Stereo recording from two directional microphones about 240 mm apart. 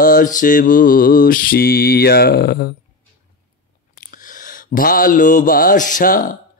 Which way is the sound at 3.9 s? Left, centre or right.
Left.